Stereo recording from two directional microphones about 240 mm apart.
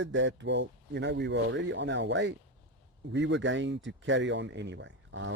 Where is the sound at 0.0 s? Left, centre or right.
Right.